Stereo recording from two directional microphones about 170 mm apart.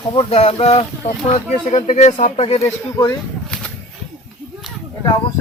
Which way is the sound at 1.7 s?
45° left (ahead or behind).